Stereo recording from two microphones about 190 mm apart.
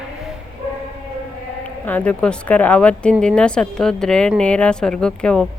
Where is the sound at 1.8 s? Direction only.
10° left (ahead or behind).